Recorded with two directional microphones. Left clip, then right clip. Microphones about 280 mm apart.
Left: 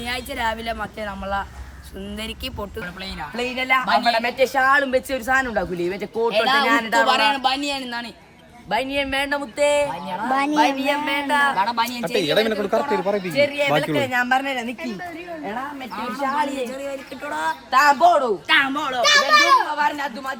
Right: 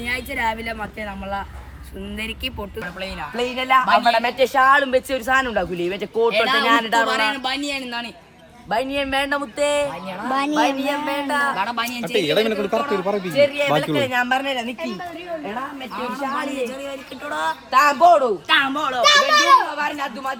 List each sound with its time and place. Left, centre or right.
0.0 s speech: centre
3.0 s speech: centre
12.0 s a man's voice: right
12.8 s speech: centre